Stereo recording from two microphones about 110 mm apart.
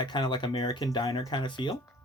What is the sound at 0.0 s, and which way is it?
Speech, 45° left (ahead or behind).